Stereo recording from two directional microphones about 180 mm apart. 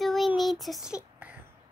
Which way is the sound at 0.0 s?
Centre (ahead or behind).